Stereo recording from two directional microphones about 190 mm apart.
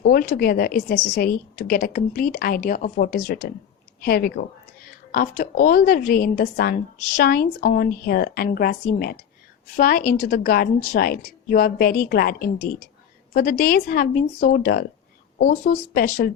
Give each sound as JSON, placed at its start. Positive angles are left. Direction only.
{"t": 0.0, "sound": "a woman's voice", "side_deg": 50}